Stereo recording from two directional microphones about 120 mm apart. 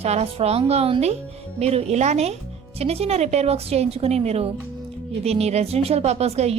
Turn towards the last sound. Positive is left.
turn(degrees=-60)  # may be behind; listen again after turning